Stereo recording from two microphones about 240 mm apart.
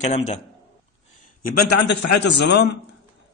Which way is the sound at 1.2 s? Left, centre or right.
Left.